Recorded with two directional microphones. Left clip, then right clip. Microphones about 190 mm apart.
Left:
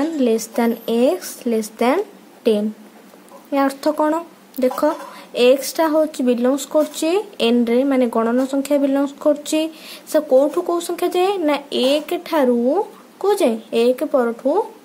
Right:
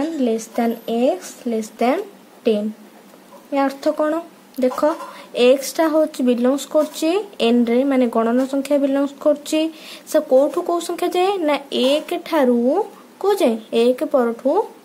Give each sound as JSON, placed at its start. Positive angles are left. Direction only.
{"t": 0.0, "sound": "speech", "side_deg": 15}